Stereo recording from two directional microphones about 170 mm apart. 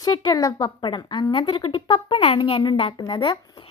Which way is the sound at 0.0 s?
25° left (ahead or behind).